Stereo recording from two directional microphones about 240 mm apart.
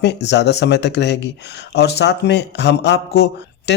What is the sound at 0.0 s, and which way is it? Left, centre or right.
A man's voice, left.